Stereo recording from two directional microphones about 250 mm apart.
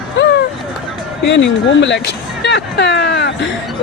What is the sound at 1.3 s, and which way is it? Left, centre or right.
A man's voice, left.